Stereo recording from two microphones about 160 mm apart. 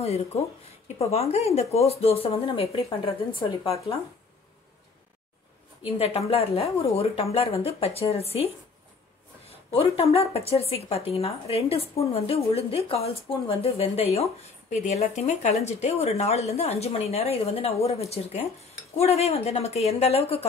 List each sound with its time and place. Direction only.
0.0 s speech: 40° left (ahead or behind)
5.9 s speech: 40° left (ahead or behind)
9.5 s a sound: 35° left (ahead or behind)
10.1 s speech: 40° left (ahead or behind)